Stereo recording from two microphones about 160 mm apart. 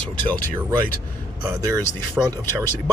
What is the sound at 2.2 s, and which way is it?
Speech, 15° right (ahead or behind).